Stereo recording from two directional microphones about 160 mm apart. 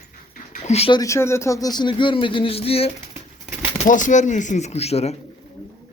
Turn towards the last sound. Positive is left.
turn(degrees=40)  # may be behind; listen again after turning